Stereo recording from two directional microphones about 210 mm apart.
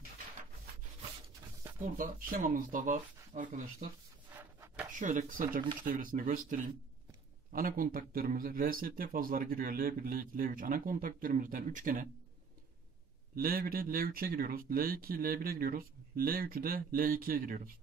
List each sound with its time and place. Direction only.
1.8 s speech: 40° right (ahead or behind)
4.4 s a sound: 10° right (ahead or behind)
4.9 s speech: 35° right (ahead or behind)
13.4 s speech: 45° right (ahead or behind)